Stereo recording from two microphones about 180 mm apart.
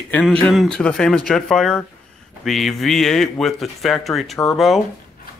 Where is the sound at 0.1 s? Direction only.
5° left (ahead or behind).